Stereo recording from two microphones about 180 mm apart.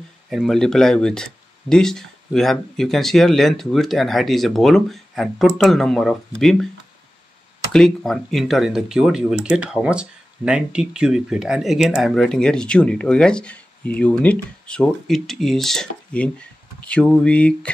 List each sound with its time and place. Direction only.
0.3 s speech: centre (ahead or behind)
7.7 s speech: centre (ahead or behind)